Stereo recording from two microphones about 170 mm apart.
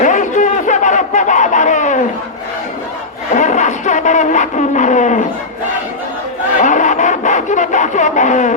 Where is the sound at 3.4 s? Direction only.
45° left (ahead or behind).